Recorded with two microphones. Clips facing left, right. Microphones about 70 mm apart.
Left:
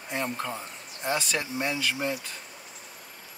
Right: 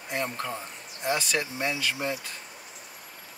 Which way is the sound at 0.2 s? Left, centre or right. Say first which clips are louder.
Left 1 dB; centre.